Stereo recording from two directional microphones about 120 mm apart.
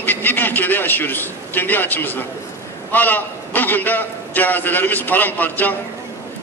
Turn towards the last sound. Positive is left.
turn(degrees=15)  # may be behind; listen again after turning